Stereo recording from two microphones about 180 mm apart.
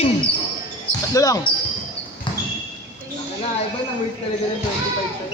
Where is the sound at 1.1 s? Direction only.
20° left (ahead or behind).